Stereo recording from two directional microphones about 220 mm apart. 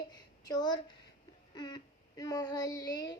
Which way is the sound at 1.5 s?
20° left (ahead or behind).